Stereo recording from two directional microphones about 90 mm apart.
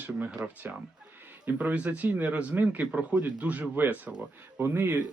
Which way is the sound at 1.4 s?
15° right (ahead or behind).